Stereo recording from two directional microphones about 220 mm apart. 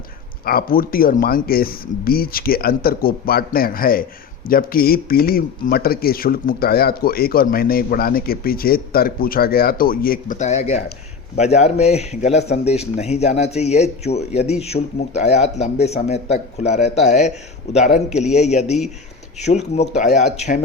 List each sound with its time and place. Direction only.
0.4 s a man's voice: 40° left (ahead or behind)